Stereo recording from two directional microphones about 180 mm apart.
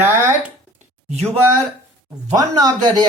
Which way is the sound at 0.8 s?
40° right (ahead or behind).